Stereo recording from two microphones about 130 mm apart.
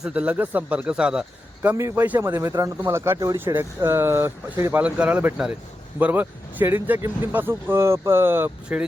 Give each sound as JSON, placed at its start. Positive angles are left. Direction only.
{"t": 0.0, "sound": "speech", "side_deg": -10}
{"t": 1.7, "sound": "speech", "side_deg": -20}